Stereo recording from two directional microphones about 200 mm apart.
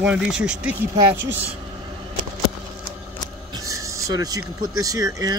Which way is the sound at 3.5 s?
15° right (ahead or behind).